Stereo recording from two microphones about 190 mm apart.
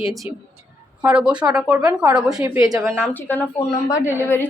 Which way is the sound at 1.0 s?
5° right (ahead or behind).